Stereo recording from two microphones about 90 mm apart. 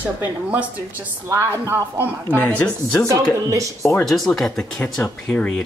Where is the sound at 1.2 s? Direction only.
30° right (ahead or behind).